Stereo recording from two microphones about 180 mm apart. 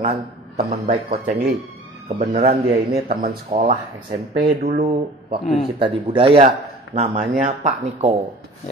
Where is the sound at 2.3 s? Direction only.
35° right (ahead or behind).